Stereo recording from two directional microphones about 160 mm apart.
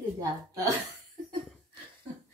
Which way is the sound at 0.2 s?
20° right (ahead or behind).